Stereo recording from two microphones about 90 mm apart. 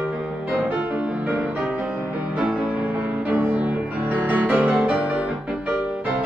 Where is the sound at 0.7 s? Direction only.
15° right (ahead or behind).